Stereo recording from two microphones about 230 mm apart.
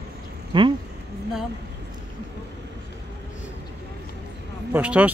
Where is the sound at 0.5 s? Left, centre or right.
Right.